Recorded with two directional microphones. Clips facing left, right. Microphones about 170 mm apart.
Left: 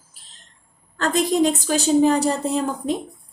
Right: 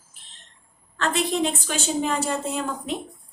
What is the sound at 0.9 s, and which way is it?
A woman's voice, 40° left (ahead or behind).